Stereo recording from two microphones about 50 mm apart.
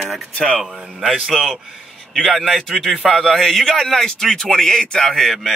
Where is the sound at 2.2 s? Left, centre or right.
Centre.